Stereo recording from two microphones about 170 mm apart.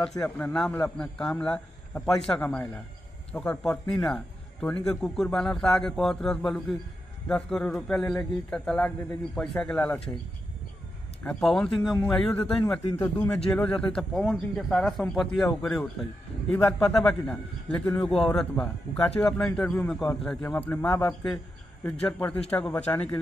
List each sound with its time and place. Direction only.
0.2 s a man's voice: 5° left (ahead or behind)
11.2 s a man's voice: 5° left (ahead or behind)
12.9 s a man's voice: 20° left (ahead or behind)
13.5 s a man's voice: 5° left (ahead or behind)